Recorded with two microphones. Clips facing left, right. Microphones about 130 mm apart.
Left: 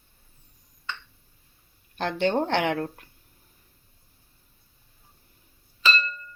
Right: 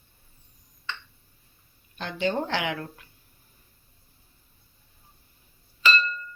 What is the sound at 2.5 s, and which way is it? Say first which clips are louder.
Speech: left 5 dB; 50° left (ahead or behind).